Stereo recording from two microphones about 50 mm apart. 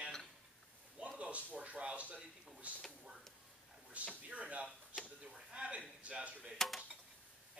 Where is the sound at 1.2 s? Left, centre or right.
Right.